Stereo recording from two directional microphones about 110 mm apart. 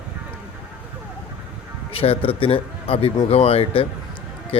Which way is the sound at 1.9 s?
60° left (ahead or behind).